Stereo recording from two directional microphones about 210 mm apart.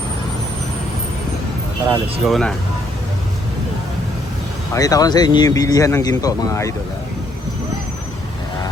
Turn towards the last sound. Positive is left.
turn(degrees=15)  # may be behind; listen again after turning